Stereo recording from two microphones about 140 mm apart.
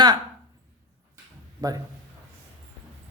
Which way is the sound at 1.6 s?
25° right (ahead or behind).